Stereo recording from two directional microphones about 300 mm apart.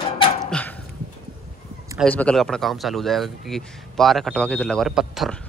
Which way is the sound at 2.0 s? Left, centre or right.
Centre.